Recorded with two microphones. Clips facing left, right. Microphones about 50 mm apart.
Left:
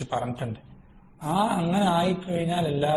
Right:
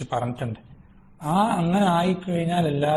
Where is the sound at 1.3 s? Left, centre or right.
Centre.